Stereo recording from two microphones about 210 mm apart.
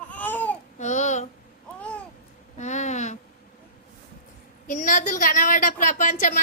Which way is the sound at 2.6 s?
35° left (ahead or behind).